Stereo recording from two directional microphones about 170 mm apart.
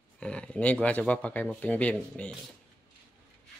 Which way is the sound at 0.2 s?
5° left (ahead or behind).